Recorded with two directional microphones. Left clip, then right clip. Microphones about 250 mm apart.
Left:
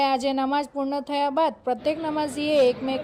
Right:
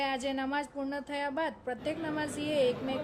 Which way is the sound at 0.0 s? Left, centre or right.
Left.